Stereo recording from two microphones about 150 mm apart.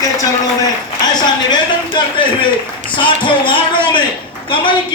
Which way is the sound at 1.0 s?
30° left (ahead or behind).